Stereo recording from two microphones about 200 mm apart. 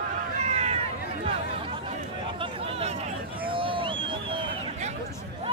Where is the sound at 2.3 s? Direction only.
25° right (ahead or behind).